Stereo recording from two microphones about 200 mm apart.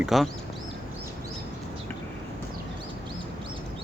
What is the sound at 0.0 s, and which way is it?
Speech, centre (ahead or behind).